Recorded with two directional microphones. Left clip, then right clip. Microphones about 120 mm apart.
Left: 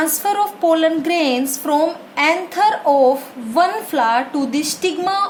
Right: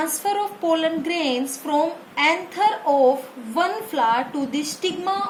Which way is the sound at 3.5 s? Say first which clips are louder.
Left 6 dB; 45° left (ahead or behind).